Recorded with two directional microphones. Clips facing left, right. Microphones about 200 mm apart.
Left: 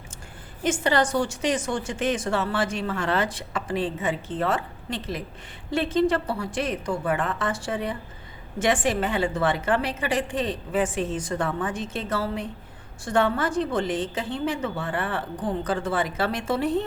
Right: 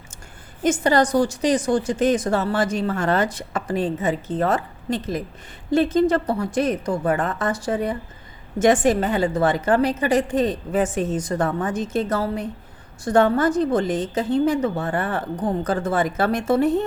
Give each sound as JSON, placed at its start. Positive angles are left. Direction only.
{"t": 0.6, "sound": "a woman's voice", "side_deg": -40}